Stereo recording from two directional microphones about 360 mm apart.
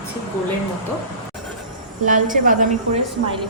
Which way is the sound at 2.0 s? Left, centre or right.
Right.